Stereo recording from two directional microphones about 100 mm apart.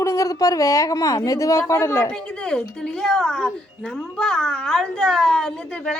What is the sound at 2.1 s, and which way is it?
Speech, 10° left (ahead or behind).